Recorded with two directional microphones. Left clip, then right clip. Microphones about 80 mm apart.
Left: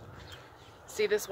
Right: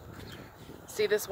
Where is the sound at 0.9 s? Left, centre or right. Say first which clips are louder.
Right 1 dB; right.